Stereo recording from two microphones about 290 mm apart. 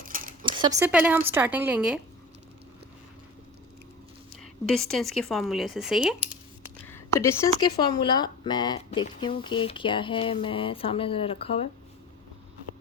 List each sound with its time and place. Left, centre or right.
0.0 s a sound: right
0.4 s speech: centre
4.6 s speech: centre
6.9 s speech: centre